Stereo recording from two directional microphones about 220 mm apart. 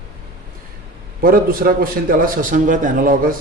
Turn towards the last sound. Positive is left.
turn(degrees=-40)  # may be behind; listen again after turning